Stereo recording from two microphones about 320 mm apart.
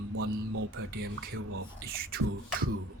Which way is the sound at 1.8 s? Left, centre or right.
Right.